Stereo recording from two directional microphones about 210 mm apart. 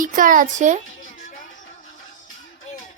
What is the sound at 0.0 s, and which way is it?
Speech, 40° right (ahead or behind).